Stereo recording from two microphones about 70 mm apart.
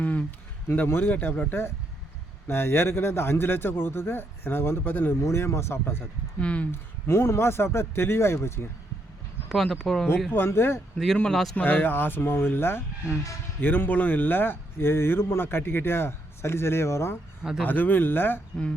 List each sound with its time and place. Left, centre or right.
0.0 s a sound: left
0.9 s speech: left
5.2 s speech: left
6.4 s speech: centre
6.7 s speech: left
9.5 s speech: centre
10.3 s speech: left
10.9 s speech: centre
11.5 s speech: left
17.6 s speech: left